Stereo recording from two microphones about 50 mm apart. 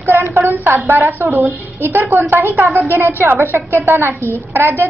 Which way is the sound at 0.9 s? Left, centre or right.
Right.